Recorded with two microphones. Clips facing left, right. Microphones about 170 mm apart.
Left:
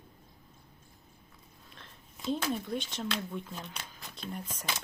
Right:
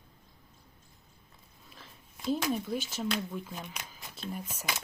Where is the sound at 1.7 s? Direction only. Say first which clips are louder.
Right 2 dB; 5° right (ahead or behind).